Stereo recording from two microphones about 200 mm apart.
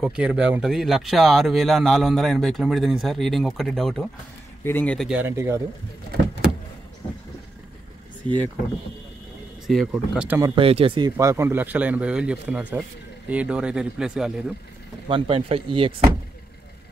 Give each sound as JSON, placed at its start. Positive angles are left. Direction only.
{"t": 0.0, "sound": "speech", "side_deg": -5}
{"t": 8.2, "sound": "speech", "side_deg": -25}
{"t": 9.7, "sound": "speech", "side_deg": 0}
{"t": 10.5, "sound": "speech", "side_deg": -30}
{"t": 11.1, "sound": "speech", "side_deg": -15}
{"t": 15.0, "sound": "speech", "side_deg": -25}